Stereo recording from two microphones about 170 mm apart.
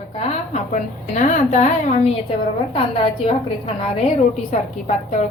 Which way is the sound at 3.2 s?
35° left (ahead or behind).